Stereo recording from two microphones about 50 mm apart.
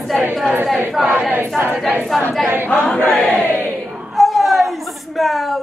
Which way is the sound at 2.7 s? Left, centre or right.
Left.